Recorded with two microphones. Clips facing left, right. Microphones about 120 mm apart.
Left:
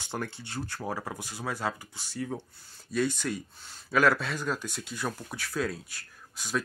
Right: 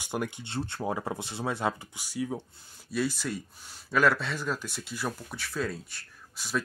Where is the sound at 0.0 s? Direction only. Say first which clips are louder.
Right 3 dB; 10° right (ahead or behind).